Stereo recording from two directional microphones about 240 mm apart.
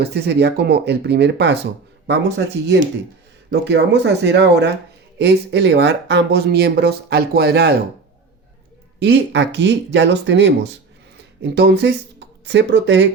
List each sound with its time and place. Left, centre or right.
0.0 s speech: right
9.0 s speech: right